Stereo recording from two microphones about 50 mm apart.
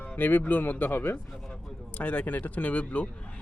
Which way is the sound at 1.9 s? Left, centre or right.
Left.